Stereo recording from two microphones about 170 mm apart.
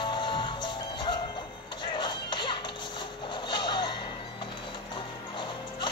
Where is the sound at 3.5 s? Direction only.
25° left (ahead or behind).